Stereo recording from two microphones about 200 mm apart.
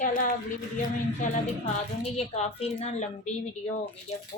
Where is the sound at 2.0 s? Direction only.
30° left (ahead or behind).